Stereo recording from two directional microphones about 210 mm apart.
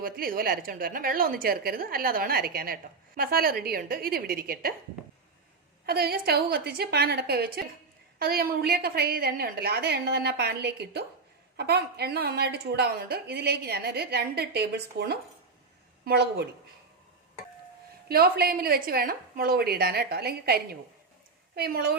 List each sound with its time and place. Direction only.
0.0 s a woman's voice: 45° right (ahead or behind)
5.8 s a woman's voice: 50° right (ahead or behind)
18.1 s a woman's voice: 45° right (ahead or behind)